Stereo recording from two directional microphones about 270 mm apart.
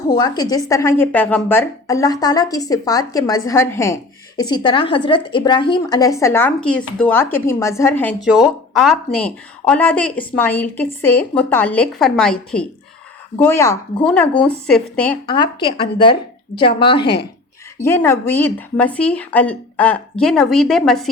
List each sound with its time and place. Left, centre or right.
0.1 s a woman's voice: centre
15.3 s a woman's voice: centre
17.0 s speech: left
17.7 s speech: centre